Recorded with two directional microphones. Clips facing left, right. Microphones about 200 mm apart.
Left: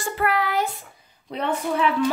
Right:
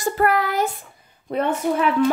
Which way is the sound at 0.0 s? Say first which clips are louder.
Right 4 dB; 45° right (ahead or behind).